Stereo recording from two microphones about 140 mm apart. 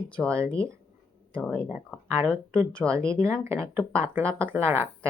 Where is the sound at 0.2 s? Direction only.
10° left (ahead or behind).